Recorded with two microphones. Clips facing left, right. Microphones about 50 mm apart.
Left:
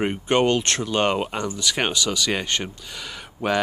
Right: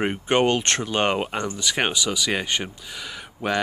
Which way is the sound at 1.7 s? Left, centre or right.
Centre.